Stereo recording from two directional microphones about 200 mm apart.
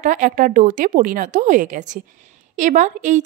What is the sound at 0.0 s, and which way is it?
Speech, 40° right (ahead or behind).